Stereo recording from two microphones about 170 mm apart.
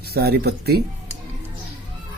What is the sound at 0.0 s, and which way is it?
Speech, 70° right (ahead or behind).